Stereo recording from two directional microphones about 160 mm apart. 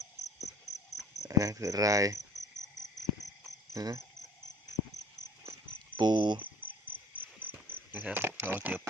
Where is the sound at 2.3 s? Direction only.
25° left (ahead or behind).